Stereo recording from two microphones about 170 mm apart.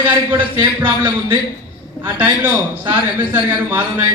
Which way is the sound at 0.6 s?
30° right (ahead or behind).